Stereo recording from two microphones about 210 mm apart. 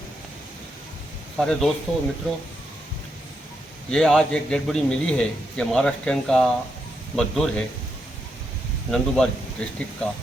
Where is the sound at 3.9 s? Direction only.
Centre (ahead or behind).